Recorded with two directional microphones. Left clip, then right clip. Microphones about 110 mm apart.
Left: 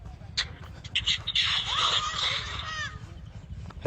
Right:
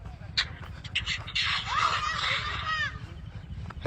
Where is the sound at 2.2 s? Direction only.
60° left (ahead or behind).